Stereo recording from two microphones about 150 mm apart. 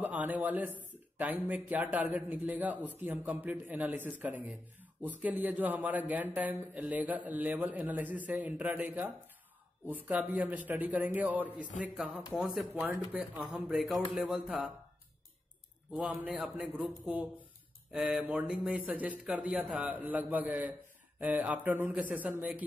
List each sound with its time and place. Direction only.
0.0 s speech: 10° right (ahead or behind)
13.1 s speech: 5° right (ahead or behind)
15.9 s speech: 5° right (ahead or behind)